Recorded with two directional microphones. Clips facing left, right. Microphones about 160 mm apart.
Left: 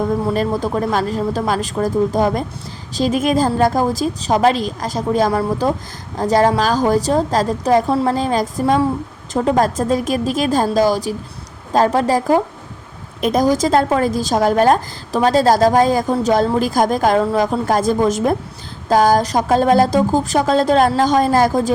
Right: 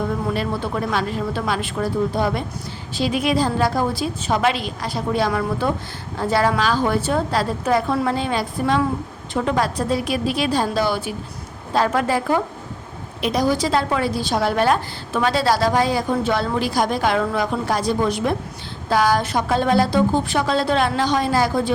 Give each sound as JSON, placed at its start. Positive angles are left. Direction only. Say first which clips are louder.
{"t": 0.3, "sound": "a woman's voice", "louder": "left 5 dB", "side_deg": 40}